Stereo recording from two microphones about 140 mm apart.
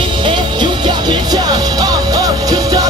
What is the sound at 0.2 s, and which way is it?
Music, 35° right (ahead or behind).